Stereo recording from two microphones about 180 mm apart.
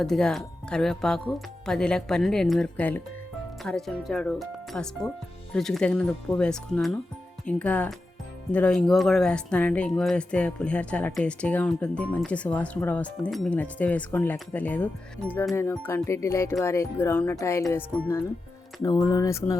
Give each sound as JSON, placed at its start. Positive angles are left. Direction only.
{"t": 0.0, "sound": "speech", "side_deg": 5}